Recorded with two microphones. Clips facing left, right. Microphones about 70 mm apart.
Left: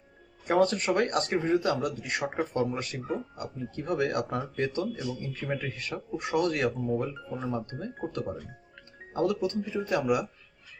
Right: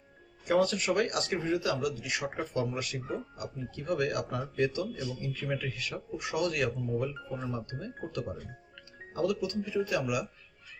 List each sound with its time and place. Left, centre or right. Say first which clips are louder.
0.4 s speech: left 3 dB; left
7.1 s speech: left 1 dB; centre
7.5 s speech: left 4 dB; left
9.1 s speech: left 3 dB; left